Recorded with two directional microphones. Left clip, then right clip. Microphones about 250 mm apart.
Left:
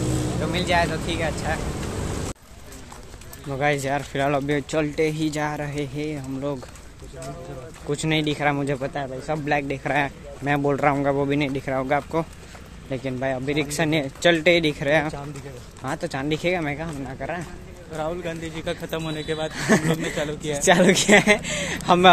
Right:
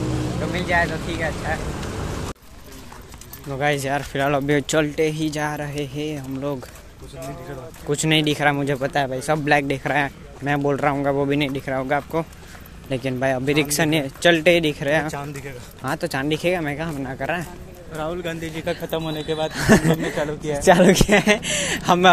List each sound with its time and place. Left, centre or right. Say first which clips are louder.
0.0 s speech: even; centre
3.4 s a man's voice: right 1 dB; centre
7.9 s a man's voice: right 4 dB; centre
8.9 s a man's voice: right 6 dB; centre
12.9 s a man's voice: right 4 dB; centre
15.8 s a man's voice: right 3 dB; centre
16.8 s a man's voice: right 4 dB; centre
17.9 s speech: right 1 dB; right
18.8 s a man's voice: right 3 dB; centre